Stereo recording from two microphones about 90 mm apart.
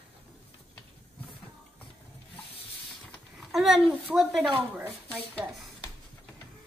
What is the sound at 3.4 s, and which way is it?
A child's voice, centre (ahead or behind).